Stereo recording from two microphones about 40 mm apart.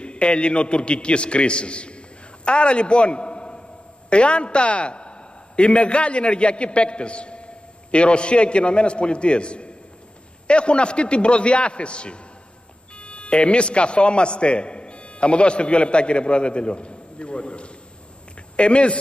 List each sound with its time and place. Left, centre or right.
0.0 s a man's voice: left